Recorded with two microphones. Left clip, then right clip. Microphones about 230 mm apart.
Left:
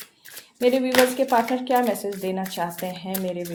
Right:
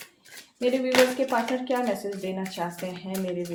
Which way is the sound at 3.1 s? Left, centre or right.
Left.